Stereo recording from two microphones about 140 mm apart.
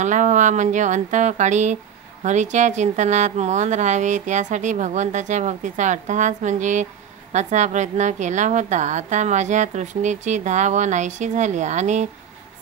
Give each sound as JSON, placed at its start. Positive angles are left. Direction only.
{"t": 0.0, "sound": "a woman's voice", "side_deg": -60}